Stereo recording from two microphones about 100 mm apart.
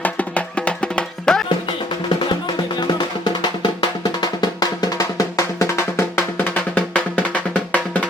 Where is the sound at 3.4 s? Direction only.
45° left (ahead or behind).